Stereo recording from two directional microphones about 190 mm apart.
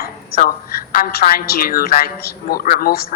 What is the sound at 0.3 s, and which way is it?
A woman's voice, 50° left (ahead or behind).